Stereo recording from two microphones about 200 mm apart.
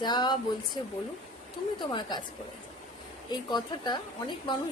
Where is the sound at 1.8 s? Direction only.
25° left (ahead or behind).